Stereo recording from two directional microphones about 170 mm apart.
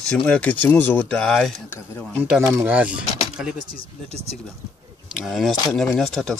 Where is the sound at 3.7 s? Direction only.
40° right (ahead or behind).